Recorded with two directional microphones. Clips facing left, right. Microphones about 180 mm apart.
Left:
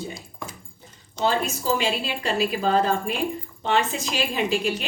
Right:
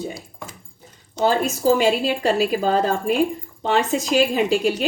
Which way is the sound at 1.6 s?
45° right (ahead or behind).